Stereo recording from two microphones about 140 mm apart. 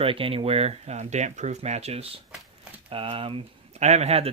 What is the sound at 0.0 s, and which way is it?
Speech, 40° right (ahead or behind).